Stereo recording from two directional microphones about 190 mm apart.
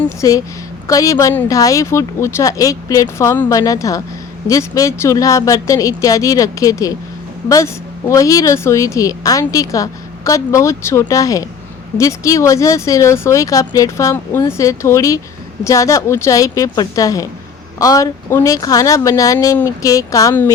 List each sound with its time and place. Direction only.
0.2 s speech: 15° left (ahead or behind)